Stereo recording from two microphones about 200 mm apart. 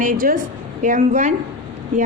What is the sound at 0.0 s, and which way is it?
A woman's voice, 45° right (ahead or behind).